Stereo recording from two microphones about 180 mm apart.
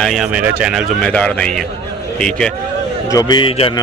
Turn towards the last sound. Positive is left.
turn(degrees=30)  # may be behind; listen again after turning